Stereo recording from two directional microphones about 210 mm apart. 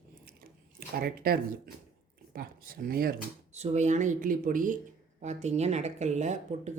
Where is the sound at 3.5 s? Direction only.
30° right (ahead or behind).